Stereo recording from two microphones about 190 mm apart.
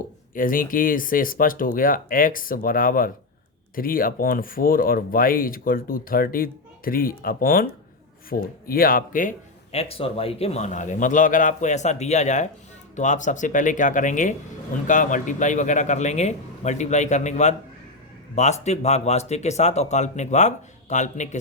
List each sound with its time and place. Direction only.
0.3 s speech: 45° left (ahead or behind)
9.7 s a man's voice: 30° left (ahead or behind)